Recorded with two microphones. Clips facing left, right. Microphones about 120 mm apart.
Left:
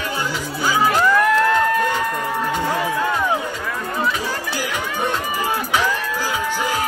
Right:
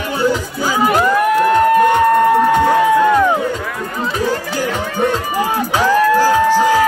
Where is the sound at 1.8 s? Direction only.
55° right (ahead or behind).